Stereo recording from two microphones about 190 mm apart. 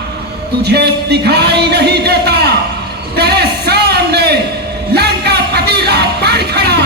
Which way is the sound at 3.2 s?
60° right (ahead or behind).